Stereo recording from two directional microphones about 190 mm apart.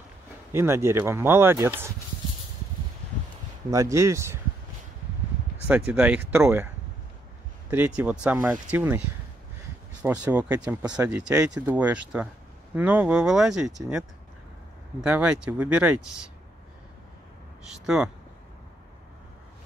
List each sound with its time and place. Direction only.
0.5 s speech: 15° right (ahead or behind)
3.7 s speech: 15° right (ahead or behind)
5.7 s speech: 5° right (ahead or behind)
7.7 s speech: 10° right (ahead or behind)
10.0 s speech: 5° right (ahead or behind)
17.8 s speech: 5° right (ahead or behind)